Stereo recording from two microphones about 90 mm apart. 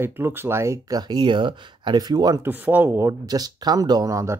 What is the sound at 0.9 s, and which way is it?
Speech, 50° right (ahead or behind).